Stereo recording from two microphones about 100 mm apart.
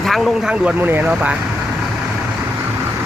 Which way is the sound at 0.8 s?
20° right (ahead or behind).